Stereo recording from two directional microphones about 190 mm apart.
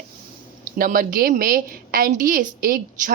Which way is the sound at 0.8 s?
50° right (ahead or behind).